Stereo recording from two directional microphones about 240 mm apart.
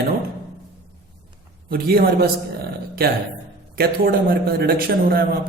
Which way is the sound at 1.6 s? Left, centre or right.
Right.